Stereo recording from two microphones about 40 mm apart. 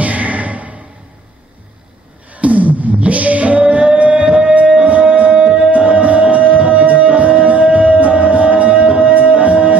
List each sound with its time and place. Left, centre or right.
0.0 s music: right
2.3 s singing: right
5.0 s music: right